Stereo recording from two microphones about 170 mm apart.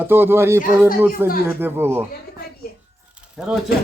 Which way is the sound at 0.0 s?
10° right (ahead or behind).